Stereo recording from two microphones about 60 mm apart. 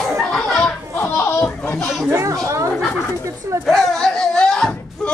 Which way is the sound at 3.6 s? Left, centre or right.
Centre.